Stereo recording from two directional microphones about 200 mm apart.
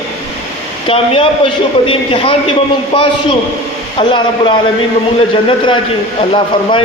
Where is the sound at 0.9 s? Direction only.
25° left (ahead or behind).